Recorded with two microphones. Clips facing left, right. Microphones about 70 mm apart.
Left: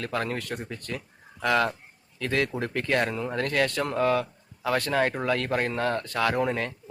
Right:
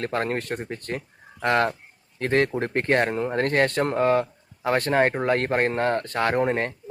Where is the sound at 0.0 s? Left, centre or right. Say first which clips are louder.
Right 4 dB; right.